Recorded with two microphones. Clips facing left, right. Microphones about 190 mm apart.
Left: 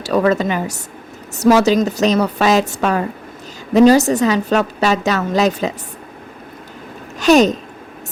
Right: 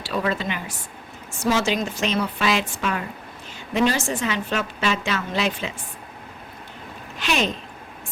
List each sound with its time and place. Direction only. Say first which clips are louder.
0.0 s a woman's voice: left 10 dB; 40° left (ahead or behind)
7.2 s a woman's voice: left 13 dB; 40° left (ahead or behind)